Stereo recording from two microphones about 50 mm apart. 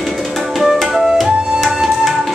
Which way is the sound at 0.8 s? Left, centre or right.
Centre.